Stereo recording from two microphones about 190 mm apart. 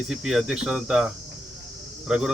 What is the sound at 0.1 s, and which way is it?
Speech, 5° right (ahead or behind).